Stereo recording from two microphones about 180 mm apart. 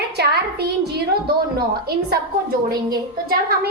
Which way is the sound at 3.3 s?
60° right (ahead or behind).